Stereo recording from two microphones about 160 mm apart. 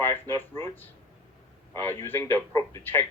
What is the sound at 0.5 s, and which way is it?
A man's voice, 15° left (ahead or behind).